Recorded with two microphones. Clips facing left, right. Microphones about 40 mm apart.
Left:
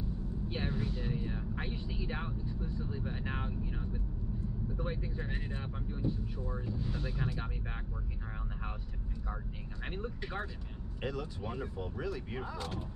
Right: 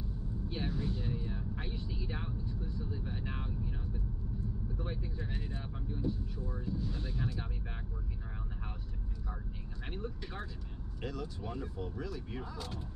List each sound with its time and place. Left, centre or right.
0.5 s vehicle: left
4.7 s speech: left
9.8 s speech: left